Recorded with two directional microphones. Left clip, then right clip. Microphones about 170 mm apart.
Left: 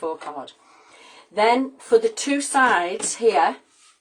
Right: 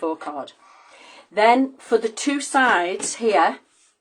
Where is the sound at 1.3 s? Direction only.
45° right (ahead or behind).